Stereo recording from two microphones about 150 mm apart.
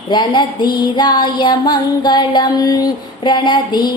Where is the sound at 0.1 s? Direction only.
30° left (ahead or behind).